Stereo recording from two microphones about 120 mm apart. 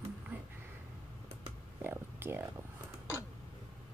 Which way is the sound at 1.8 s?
20° right (ahead or behind).